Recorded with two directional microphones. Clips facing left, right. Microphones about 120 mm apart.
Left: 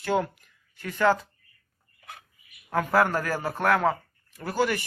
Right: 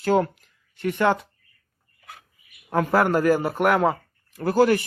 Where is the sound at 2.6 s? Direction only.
20° right (ahead or behind).